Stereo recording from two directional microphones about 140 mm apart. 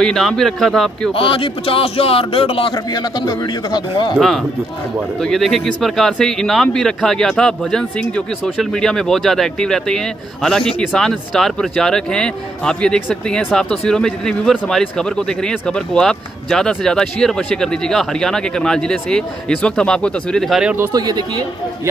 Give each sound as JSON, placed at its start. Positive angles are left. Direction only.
{"t": 0.0, "sound": "speech", "side_deg": 5}
{"t": 1.1, "sound": "speech", "side_deg": 40}
{"t": 2.7, "sound": "a man's voice", "side_deg": 30}
{"t": 5.2, "sound": "speech", "side_deg": 0}
{"t": 20.9, "sound": "speech", "side_deg": -30}